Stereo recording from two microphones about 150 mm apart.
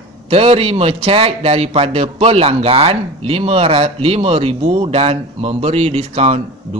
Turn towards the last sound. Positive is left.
turn(degrees=-45)  # may be behind; listen again after turning